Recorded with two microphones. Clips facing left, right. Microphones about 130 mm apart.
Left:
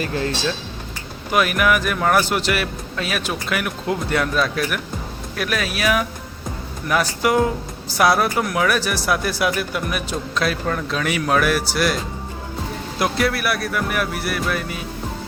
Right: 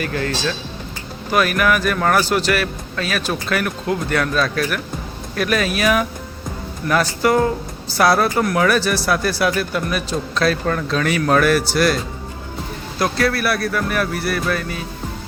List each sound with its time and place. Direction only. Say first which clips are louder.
0.0 s speech: right 1 dB; 25° left (ahead or behind)
5.4 s speech: right 4 dB; 5° left (ahead or behind)
13.0 s speech: right 2 dB; 15° left (ahead or behind)